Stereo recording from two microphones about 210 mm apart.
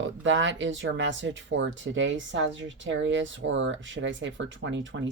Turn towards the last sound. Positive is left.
turn(degrees=-60)  # may be behind; listen again after turning